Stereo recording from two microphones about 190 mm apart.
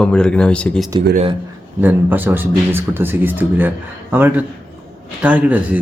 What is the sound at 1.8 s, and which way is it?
A man's voice, 10° right (ahead or behind).